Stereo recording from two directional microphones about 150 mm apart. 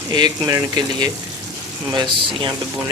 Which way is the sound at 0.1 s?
25° right (ahead or behind).